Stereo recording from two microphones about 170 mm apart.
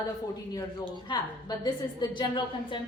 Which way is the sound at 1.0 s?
25° left (ahead or behind).